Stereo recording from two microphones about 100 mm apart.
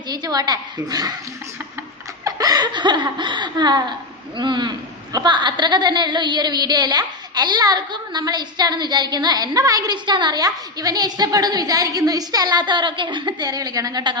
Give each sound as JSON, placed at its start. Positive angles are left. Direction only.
{"t": 0.1, "sound": "speech", "side_deg": -40}
{"t": 2.2, "sound": "a woman's voice", "side_deg": -40}